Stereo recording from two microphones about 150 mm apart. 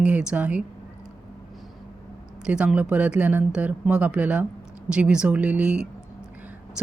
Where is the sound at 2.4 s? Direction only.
5° right (ahead or behind).